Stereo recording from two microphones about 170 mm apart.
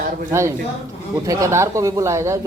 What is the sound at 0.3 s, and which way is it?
A man's voice, 15° right (ahead or behind).